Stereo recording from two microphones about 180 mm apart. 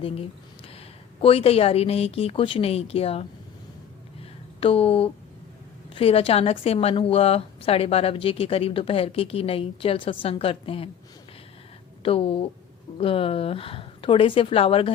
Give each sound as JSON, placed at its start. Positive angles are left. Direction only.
{"t": 1.2, "sound": "a woman's voice", "side_deg": 30}
{"t": 4.2, "sound": "a sound", "side_deg": 30}
{"t": 5.9, "sound": "a woman's voice", "side_deg": 30}
{"t": 12.0, "sound": "a woman's voice", "side_deg": 30}